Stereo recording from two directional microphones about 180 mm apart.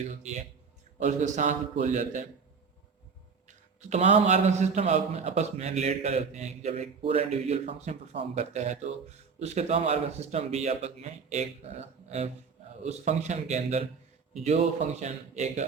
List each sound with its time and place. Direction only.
0.0 s a man's voice: 40° right (ahead or behind)
3.5 s a man's voice: 40° right (ahead or behind)